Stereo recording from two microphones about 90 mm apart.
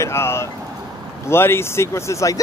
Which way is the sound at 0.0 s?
30° left (ahead or behind).